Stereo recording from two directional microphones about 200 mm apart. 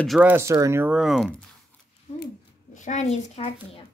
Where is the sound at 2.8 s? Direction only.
35° left (ahead or behind).